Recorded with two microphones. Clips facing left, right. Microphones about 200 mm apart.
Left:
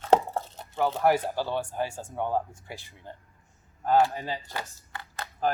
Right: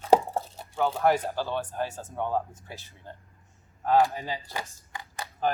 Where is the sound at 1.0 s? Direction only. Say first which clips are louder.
Left 1 dB; 10° left (ahead or behind).